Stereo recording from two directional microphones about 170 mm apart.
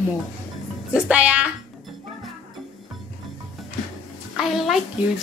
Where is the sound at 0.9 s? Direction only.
5° right (ahead or behind).